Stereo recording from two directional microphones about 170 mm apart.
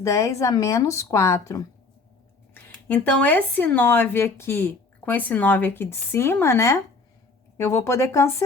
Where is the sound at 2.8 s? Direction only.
10° left (ahead or behind).